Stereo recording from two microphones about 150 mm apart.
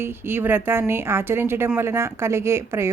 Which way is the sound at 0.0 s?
15° right (ahead or behind).